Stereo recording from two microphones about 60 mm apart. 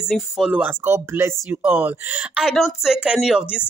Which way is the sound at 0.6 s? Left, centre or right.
Right.